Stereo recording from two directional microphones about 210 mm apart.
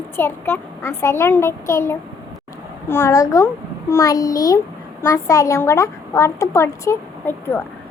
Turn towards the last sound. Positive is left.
turn(degrees=10)  # may be behind; listen again after turning